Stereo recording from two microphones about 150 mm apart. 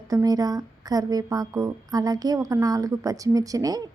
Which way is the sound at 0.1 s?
25° right (ahead or behind).